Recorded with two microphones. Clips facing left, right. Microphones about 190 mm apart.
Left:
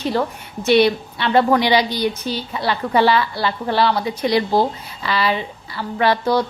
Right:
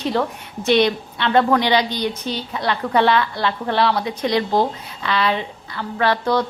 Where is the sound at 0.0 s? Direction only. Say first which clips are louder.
Even; centre (ahead or behind).